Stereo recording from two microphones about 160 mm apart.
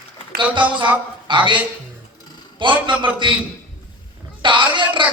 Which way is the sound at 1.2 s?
30° right (ahead or behind).